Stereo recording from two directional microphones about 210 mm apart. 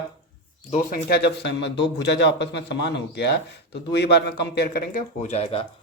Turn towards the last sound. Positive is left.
turn(degrees=30)  # may be behind; listen again after turning